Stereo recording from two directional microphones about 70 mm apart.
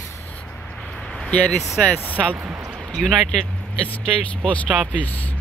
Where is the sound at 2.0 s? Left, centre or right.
Right.